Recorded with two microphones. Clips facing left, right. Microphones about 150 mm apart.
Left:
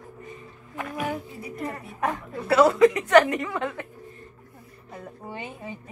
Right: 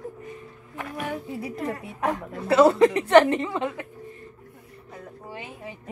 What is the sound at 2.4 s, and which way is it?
A woman's voice, 25° right (ahead or behind).